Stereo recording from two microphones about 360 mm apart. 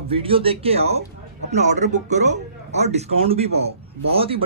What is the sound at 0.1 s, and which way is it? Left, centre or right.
Speech, centre.